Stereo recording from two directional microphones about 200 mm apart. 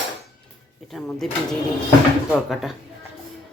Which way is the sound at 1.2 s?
Centre (ahead or behind).